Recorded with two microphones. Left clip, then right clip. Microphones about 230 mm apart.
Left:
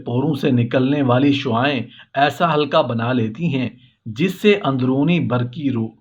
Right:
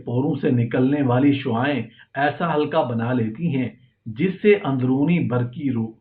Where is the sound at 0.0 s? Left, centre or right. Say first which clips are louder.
Left 2 dB; left.